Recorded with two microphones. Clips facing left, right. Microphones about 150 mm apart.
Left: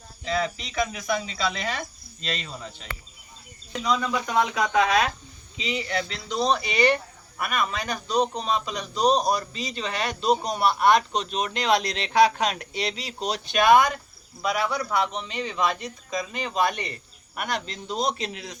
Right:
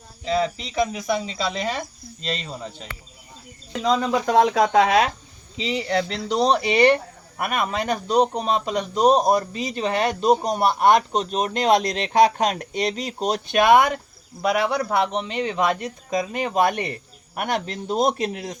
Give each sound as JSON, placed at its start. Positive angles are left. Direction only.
{"t": 0.3, "sound": "speech", "side_deg": -30}
{"t": 3.8, "sound": "speech", "side_deg": -40}
{"t": 4.8, "sound": "speech", "side_deg": -25}
{"t": 6.1, "sound": "speech", "side_deg": -70}
{"t": 13.6, "sound": "speech", "side_deg": -25}
{"t": 14.4, "sound": "speech", "side_deg": -60}